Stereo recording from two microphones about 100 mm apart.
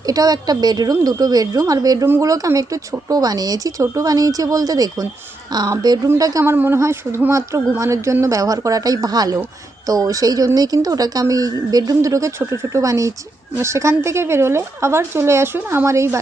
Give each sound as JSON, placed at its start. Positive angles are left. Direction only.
{"t": 0.1, "sound": "speech", "side_deg": -40}
{"t": 6.4, "sound": "speech", "side_deg": -25}